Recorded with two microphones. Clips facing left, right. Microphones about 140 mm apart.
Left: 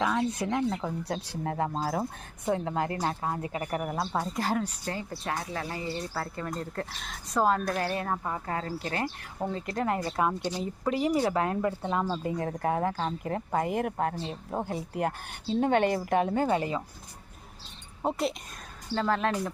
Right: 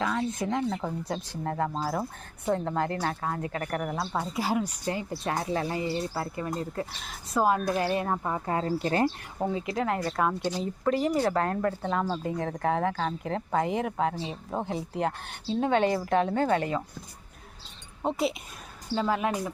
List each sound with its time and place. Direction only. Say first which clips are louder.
0.0 s a sound: left 1 dB; 10° left (ahead or behind)
1.0 s speech: even; 10° left (ahead or behind)
1.7 s speech: even; 45° left (ahead or behind)
2.4 s speech: right 1 dB; 10° left (ahead or behind); by 8.4 s 15° right (ahead or behind)
8.4 s speech: right 8 dB; 25° right (ahead or behind)
9.4 s speech: right 2 dB; 10° right (ahead or behind)
14.6 s speech: right 1 dB; 5° left (ahead or behind)
15.6 s a woman's voice: even; 55° left (ahead or behind)
16.0 s speech: right 1 dB; 10° left (ahead or behind)
18.0 s speech: right 1 dB; centre (ahead or behind)
18.9 s speech: even; 10° right (ahead or behind)